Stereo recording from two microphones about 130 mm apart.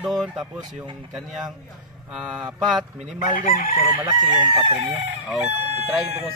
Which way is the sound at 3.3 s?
90° left.